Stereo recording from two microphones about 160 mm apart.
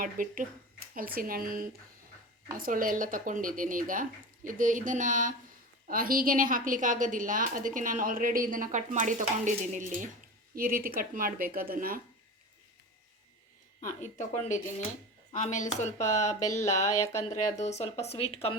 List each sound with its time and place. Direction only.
0.0 s a woman's voice: 60° right (ahead or behind)
10.5 s a woman's voice: 65° right (ahead or behind)
13.8 s speech: 45° left (ahead or behind)
16.0 s speech: 20° left (ahead or behind)
16.6 s speech: 45° left (ahead or behind)
16.8 s speech: 15° left (ahead or behind)
17.6 s speech: 45° left (ahead or behind)